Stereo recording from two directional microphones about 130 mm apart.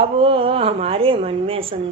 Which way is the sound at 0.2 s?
45° right (ahead or behind).